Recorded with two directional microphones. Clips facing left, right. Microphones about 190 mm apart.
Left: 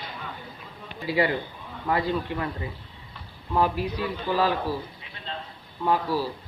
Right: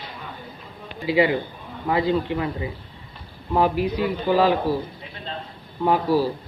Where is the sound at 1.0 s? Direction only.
20° right (ahead or behind).